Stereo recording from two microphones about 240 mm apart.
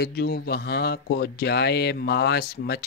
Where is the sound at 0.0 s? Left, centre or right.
Left.